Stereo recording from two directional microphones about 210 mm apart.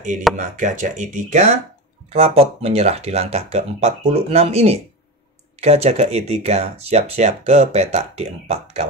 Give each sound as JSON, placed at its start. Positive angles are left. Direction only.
{"t": 0.4, "sound": "speech", "side_deg": -35}